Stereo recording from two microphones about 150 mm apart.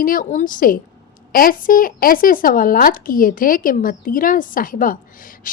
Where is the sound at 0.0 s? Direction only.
70° left (ahead or behind).